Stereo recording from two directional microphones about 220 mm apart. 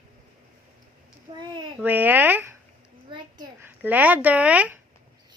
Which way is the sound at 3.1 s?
15° right (ahead or behind).